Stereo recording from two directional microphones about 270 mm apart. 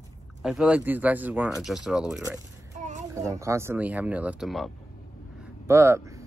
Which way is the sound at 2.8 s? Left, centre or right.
Right.